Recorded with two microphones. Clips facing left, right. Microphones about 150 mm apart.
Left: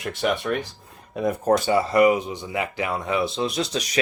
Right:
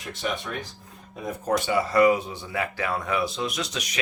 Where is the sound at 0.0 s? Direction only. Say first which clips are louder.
Left 8 dB; 75° left (ahead or behind).